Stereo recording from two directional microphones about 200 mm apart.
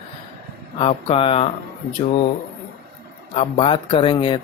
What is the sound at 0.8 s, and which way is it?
Mantra, 30° left (ahead or behind).